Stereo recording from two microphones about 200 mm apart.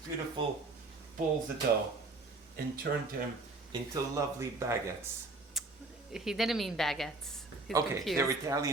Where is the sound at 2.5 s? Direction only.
50° right (ahead or behind).